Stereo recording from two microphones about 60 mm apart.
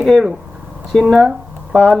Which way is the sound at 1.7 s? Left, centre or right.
Centre.